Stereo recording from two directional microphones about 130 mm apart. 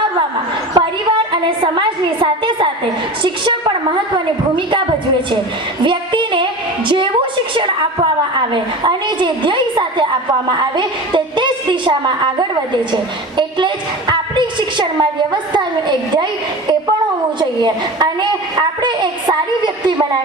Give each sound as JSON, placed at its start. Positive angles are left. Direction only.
{"t": 0.7, "sound": "a woman's voice", "side_deg": -40}
{"t": 5.8, "sound": "a sound", "side_deg": -40}
{"t": 8.4, "sound": "a woman's voice", "side_deg": -35}
{"t": 14.1, "sound": "a woman's voice", "side_deg": -35}
{"t": 17.6, "sound": "a woman's voice", "side_deg": -35}